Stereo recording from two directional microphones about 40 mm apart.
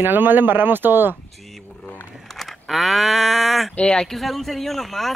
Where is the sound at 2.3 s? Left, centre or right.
Centre.